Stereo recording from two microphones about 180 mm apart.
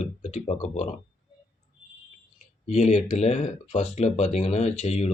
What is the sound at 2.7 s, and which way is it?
Speech, 40° left (ahead or behind).